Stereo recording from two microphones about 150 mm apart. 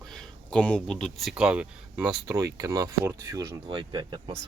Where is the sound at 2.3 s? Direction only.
25° right (ahead or behind).